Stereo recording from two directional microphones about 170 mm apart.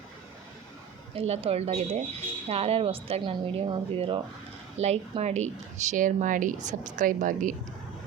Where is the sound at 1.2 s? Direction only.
35° right (ahead or behind).